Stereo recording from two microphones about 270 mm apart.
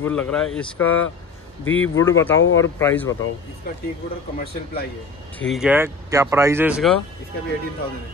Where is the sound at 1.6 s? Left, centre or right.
Left.